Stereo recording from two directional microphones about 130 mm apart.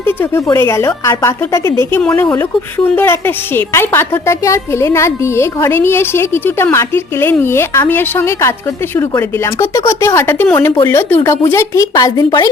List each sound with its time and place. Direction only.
0.0 s a woman's voice: 15° left (ahead or behind)